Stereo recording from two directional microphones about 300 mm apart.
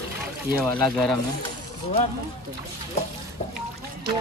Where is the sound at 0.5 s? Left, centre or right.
Centre.